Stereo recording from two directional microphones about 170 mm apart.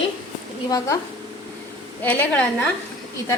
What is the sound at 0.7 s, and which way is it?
Speech, 20° left (ahead or behind).